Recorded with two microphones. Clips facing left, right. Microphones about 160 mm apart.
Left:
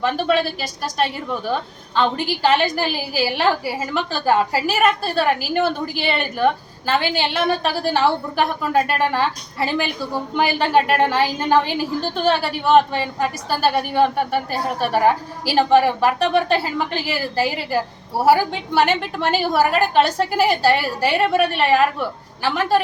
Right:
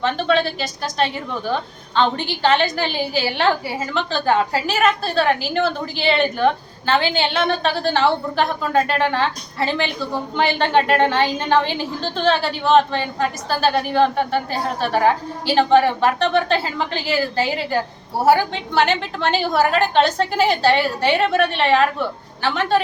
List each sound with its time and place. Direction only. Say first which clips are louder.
0.0 s a woman's voice: even; 5° left (ahead or behind)